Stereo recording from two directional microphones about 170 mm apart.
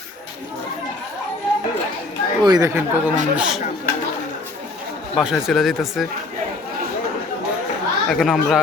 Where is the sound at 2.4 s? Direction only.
25° right (ahead or behind).